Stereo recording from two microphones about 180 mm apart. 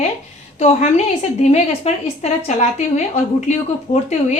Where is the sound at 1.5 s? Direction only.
35° left (ahead or behind).